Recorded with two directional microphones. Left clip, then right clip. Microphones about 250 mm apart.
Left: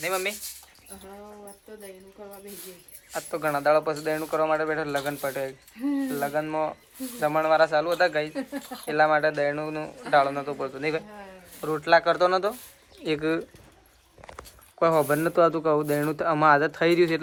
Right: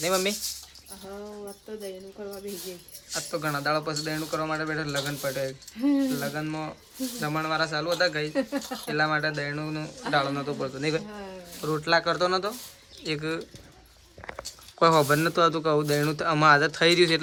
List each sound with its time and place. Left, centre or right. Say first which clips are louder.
0.0 s a man's voice: right 2 dB; centre
3.1 s a man's voice: left 2 dB; centre
14.8 s speech: right 1 dB; centre